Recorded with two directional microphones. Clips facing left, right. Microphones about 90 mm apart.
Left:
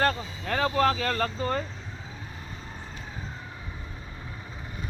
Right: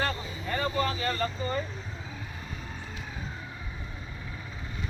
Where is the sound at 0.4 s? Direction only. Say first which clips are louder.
Left 5 dB; 90° left.